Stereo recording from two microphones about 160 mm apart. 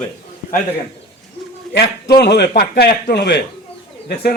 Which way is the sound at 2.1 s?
90° left.